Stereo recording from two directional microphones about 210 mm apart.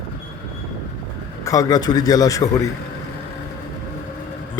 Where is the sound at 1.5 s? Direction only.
15° left (ahead or behind).